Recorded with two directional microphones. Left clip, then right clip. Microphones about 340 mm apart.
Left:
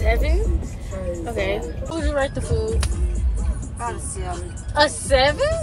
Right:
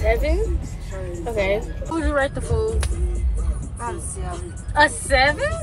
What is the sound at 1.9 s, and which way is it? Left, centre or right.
A woman's voice, centre.